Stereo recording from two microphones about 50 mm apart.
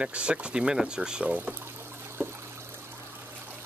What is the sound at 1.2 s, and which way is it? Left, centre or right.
Speech, right.